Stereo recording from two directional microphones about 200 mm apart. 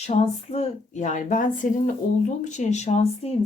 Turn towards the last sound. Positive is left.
turn(degrees=30)  # may be behind; listen again after turning